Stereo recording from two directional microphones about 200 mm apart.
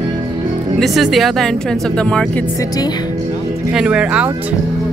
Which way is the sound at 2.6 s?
20° left (ahead or behind).